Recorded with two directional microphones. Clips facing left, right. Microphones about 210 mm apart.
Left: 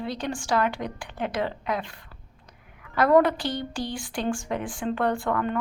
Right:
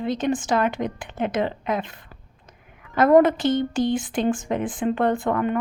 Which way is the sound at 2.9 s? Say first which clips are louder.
Right 4 dB; 20° right (ahead or behind).